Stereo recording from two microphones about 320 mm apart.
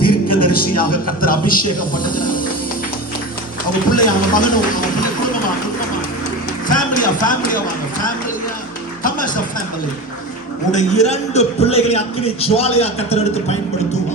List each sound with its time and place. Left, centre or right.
0.0 s music: left
1.2 s a man's voice: left
3.8 s a man's voice: left
6.7 s a man's voice: left
9.0 s speech: left
10.7 s a man's voice: left